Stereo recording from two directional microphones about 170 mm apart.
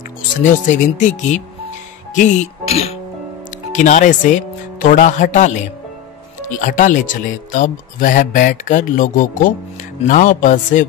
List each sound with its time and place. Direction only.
0.4 s speech: 45° left (ahead or behind)
3.7 s speech: 45° left (ahead or behind)
6.6 s speech: 50° left (ahead or behind)